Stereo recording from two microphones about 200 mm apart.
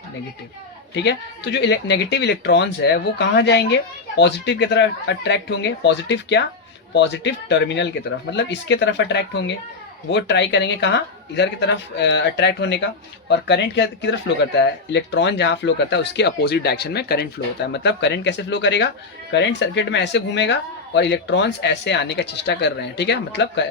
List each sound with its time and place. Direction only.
0.9 s speech: 60° left (ahead or behind)